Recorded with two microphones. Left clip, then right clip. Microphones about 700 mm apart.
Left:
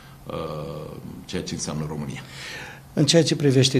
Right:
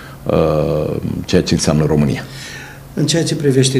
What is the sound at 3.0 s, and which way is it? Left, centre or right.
Speech, left.